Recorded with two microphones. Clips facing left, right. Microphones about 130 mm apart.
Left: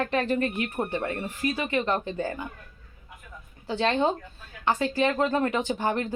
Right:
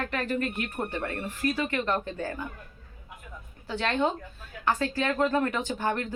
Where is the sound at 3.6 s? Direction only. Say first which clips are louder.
Left 3 dB; 25° left (ahead or behind).